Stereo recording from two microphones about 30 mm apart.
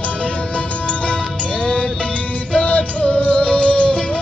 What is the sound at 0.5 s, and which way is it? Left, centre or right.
Music, left.